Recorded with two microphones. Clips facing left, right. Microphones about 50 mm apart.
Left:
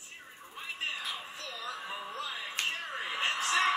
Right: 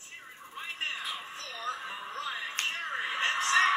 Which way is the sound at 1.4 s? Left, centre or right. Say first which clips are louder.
Right 3 dB; right.